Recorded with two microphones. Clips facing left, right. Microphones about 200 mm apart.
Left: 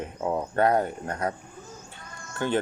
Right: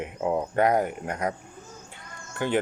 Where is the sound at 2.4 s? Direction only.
15° right (ahead or behind).